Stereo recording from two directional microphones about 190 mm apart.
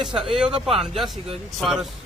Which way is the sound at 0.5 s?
30° right (ahead or behind).